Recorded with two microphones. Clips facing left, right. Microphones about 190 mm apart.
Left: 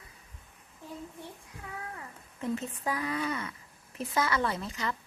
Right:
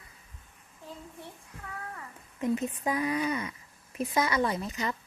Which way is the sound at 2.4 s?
15° right (ahead or behind).